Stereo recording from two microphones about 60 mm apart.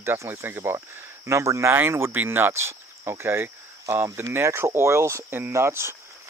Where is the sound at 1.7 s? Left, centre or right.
Right.